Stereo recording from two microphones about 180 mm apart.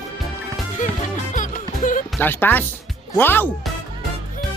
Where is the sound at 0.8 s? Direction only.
45° left (ahead or behind).